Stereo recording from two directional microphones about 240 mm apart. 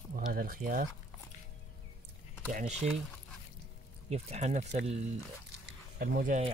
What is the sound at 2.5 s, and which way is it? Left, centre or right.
Speech, right.